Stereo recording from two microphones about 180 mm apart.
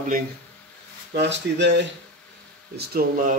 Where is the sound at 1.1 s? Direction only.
70° right (ahead or behind).